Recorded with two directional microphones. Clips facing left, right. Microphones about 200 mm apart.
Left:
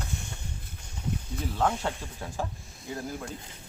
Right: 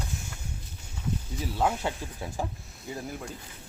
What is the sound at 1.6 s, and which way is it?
Speech, 5° right (ahead or behind).